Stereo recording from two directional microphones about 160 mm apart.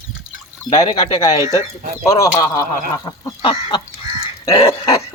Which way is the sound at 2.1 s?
20° left (ahead or behind).